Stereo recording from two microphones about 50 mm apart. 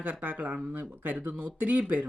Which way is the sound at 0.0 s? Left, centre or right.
Right.